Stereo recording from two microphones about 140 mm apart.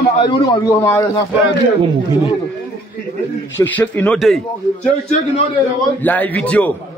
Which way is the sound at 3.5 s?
10° left (ahead or behind).